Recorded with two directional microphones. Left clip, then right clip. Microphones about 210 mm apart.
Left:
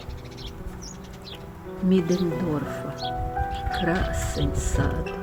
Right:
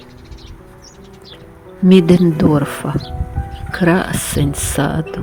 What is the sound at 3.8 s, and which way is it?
Speech, 50° right (ahead or behind).